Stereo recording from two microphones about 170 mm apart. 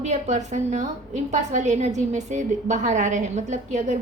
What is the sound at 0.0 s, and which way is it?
A woman's voice, 45° right (ahead or behind).